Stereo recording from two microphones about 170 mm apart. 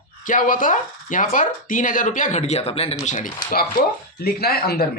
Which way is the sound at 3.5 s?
60° left (ahead or behind).